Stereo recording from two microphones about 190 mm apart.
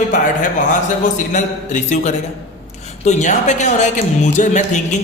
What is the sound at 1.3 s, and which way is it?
A man's voice, 40° left (ahead or behind).